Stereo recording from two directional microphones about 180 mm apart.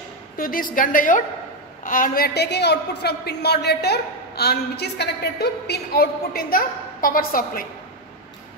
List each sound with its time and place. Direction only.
0.4 s a woman's voice: 50° left (ahead or behind)